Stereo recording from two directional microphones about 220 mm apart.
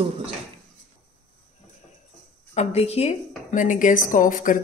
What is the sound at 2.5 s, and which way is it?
A woman's voice, 30° left (ahead or behind).